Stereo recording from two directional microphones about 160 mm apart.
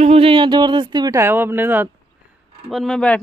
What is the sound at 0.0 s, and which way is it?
Speech, 40° right (ahead or behind).